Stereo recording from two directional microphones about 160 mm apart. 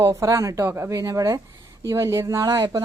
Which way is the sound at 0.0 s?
20° right (ahead or behind).